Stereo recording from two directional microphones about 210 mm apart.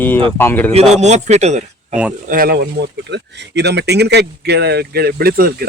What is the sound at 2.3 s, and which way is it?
Speech, 45° right (ahead or behind).